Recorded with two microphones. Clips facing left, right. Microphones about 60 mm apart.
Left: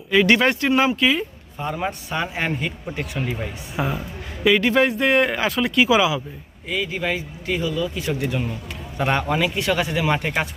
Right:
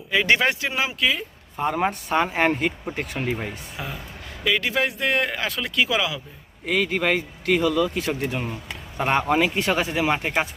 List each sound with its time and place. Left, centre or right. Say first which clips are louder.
0.3 s speech: left 5 dB; centre
1.5 s a man's voice: right 3 dB; right
1.9 s speech: right 4 dB; right
3.8 s speech: left 10 dB; left
4.4 s speech: left 6 dB; centre
6.7 s speech: right 3 dB; right
8.2 s speech: left 2 dB; right